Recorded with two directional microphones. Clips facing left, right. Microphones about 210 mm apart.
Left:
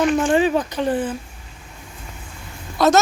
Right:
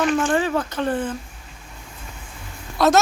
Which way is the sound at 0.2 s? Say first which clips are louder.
Left 3 dB; 15° left (ahead or behind).